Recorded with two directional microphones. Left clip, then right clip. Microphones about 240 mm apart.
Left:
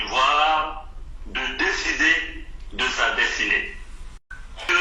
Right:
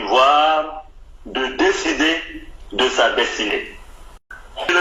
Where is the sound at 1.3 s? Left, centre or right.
Right.